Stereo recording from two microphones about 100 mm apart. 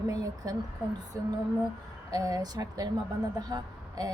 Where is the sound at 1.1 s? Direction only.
35° right (ahead or behind).